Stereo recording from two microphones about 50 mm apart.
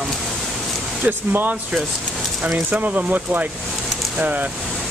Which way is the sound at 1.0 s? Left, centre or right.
Right.